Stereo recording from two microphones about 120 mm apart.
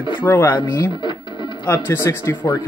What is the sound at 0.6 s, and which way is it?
Speech, 40° left (ahead or behind).